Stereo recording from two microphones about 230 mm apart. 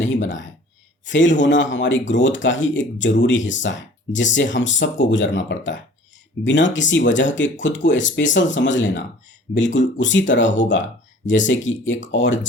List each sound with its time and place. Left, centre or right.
0.0 s speech: left